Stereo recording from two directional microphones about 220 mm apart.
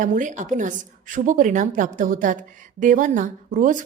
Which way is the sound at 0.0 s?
35° right (ahead or behind).